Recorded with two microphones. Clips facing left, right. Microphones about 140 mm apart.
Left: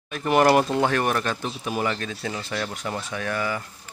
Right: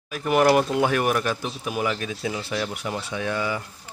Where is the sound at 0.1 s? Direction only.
5° right (ahead or behind).